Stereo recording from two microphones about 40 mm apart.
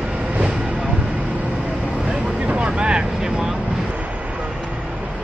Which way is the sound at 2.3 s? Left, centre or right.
Right.